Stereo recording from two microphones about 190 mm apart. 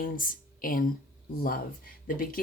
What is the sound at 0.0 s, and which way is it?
Speech, 50° left (ahead or behind).